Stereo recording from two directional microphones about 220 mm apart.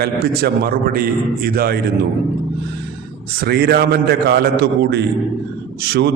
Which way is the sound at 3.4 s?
45° right (ahead or behind).